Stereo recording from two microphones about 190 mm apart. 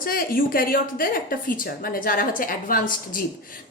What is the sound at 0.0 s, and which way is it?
A woman's voice, 50° left (ahead or behind).